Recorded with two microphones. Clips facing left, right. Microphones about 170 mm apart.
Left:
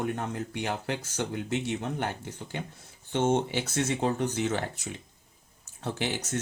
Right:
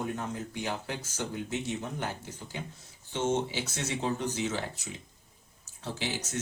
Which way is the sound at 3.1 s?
55° left (ahead or behind).